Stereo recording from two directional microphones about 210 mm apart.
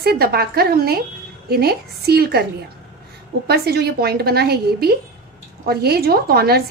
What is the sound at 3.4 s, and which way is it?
A woman's voice, 50° right (ahead or behind).